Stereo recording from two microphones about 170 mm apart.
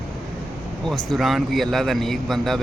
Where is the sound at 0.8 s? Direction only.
Centre (ahead or behind).